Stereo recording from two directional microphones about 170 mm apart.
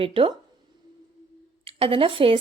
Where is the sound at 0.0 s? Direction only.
35° right (ahead or behind).